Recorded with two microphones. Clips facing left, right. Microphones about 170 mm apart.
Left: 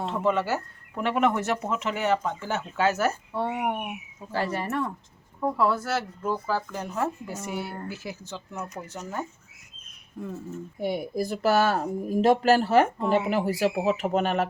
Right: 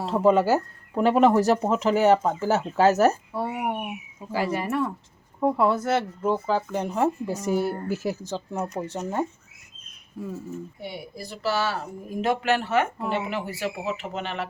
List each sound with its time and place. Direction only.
0.0 s speech: 35° right (ahead or behind)
3.3 s speech: 10° right (ahead or behind)
5.4 s speech: 25° right (ahead or behind)
7.4 s speech: 40° right (ahead or behind)
10.2 s speech: 5° right (ahead or behind)
10.8 s speech: 50° left (ahead or behind)